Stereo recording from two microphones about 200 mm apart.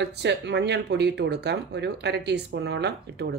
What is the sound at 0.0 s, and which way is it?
Speech, 60° right (ahead or behind).